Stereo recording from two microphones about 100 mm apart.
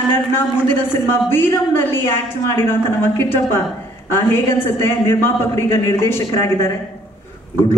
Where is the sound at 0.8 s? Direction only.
20° left (ahead or behind).